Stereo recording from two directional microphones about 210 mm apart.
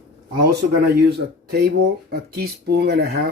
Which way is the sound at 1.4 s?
50° right (ahead or behind).